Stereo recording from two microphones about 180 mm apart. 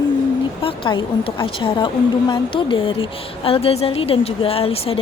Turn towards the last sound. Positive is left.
turn(degrees=35)  # may be behind; listen again after turning